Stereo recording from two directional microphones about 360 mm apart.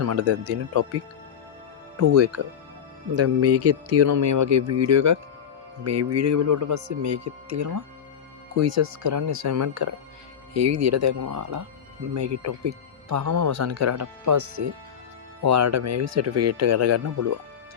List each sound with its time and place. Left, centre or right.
0.0 s speech: right
2.0 s speech: right